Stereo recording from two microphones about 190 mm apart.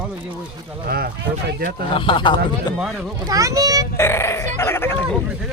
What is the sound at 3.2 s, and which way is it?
Speech, 15° right (ahead or behind).